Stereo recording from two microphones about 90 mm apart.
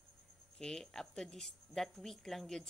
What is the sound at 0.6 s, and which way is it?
A woman's voice, 5° left (ahead or behind).